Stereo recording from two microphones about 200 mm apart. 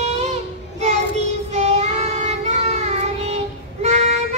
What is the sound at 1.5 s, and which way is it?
Child singing, 35° right (ahead or behind).